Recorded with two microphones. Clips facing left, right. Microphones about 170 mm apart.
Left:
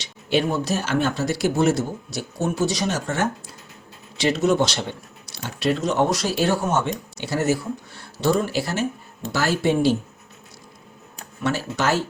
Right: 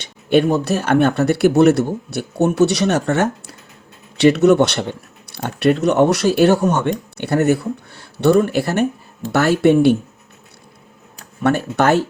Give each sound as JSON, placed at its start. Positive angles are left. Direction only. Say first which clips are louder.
{"t": 0.0, "sound": "speech", "louder": "right 7 dB", "side_deg": -55}
{"t": 11.4, "sound": "speech", "louder": "right 7 dB", "side_deg": -60}